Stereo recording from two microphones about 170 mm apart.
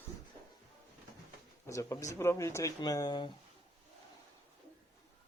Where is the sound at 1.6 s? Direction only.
15° left (ahead or behind).